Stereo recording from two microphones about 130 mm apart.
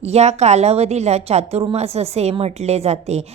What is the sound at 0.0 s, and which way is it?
A woman's voice, 55° right (ahead or behind).